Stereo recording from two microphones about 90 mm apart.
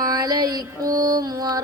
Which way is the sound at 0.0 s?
45° right (ahead or behind).